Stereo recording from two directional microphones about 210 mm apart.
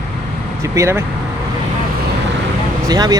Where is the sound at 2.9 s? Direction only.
20° right (ahead or behind).